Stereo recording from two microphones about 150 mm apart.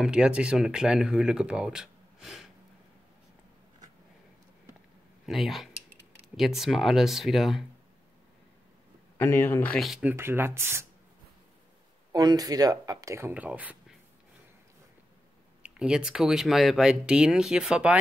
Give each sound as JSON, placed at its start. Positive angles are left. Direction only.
{"t": 0.0, "sound": "speech", "side_deg": -5}
{"t": 5.2, "sound": "speech", "side_deg": 0}
{"t": 9.2, "sound": "speech", "side_deg": 15}
{"t": 9.8, "sound": "speech", "side_deg": -5}
{"t": 10.1, "sound": "speech", "side_deg": -15}
{"t": 12.1, "sound": "speech", "side_deg": -25}
{"t": 15.6, "sound": "speech", "side_deg": -5}